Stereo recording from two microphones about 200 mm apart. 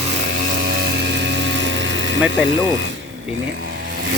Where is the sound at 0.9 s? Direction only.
60° right (ahead or behind).